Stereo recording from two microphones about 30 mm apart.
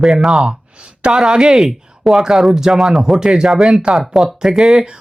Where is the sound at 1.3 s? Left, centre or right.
Right.